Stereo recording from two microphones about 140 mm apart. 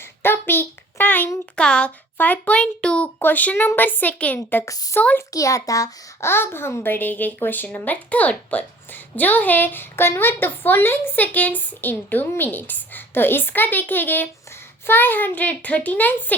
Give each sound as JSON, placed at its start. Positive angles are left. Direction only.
{"t": 0.2, "sound": "a child's voice", "side_deg": 15}
{"t": 4.4, "sound": "a woman's voice", "side_deg": 20}
{"t": 4.9, "sound": "a child's voice", "side_deg": 15}
{"t": 5.3, "sound": "a child's voice", "side_deg": 25}